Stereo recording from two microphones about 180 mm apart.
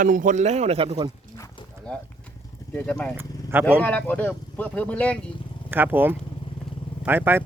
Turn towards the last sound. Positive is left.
turn(degrees=-10)  # may be behind; listen again after turning